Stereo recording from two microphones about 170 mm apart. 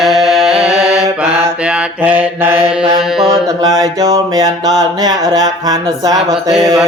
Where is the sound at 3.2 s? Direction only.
25° right (ahead or behind).